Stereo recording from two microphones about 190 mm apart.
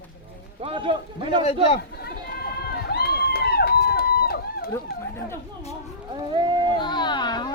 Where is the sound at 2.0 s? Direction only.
55° left (ahead or behind).